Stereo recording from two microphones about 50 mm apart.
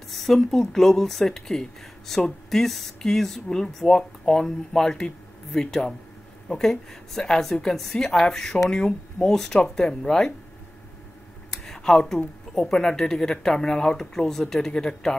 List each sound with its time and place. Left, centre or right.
0.1 s speech: centre
11.5 s a sound: centre
12.5 s speech: centre